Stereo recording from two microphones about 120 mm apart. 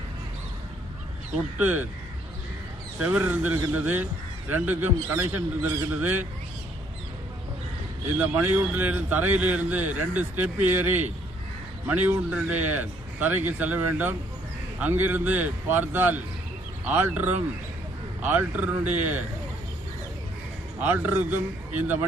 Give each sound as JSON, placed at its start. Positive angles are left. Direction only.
{"t": 1.5, "sound": "a man's voice", "side_deg": -15}
{"t": 3.0, "sound": "a man's voice", "side_deg": -10}
{"t": 8.2, "sound": "a man's voice", "side_deg": -15}
{"t": 20.8, "sound": "a man's voice", "side_deg": -15}